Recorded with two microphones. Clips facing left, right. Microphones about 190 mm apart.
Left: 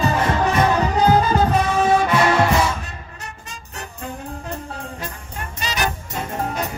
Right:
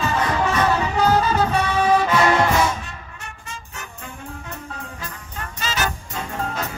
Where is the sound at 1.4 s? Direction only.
40° left (ahead or behind).